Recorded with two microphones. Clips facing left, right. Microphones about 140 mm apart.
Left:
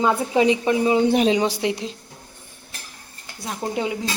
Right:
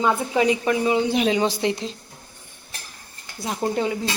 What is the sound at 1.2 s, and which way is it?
Speech, 15° left (ahead or behind).